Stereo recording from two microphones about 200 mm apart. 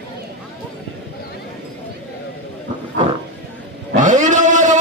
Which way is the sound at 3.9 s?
40° right (ahead or behind).